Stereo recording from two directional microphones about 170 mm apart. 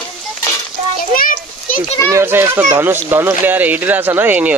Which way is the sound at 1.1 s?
55° left (ahead or behind).